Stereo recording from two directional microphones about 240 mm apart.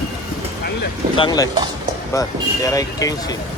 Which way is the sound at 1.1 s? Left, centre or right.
Centre.